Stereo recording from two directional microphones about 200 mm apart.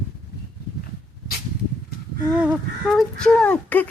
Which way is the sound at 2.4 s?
Centre (ahead or behind).